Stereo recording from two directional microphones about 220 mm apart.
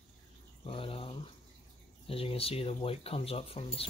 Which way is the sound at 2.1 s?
25° left (ahead or behind).